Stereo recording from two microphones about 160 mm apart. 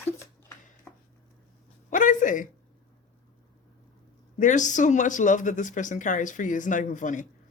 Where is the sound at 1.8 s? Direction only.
55° left (ahead or behind).